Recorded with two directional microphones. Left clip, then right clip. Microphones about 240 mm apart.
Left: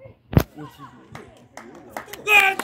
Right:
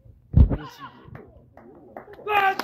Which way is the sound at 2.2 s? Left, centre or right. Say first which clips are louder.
Left 5 dB; centre.